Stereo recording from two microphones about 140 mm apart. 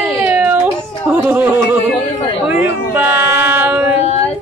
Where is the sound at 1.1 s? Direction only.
15° right (ahead or behind).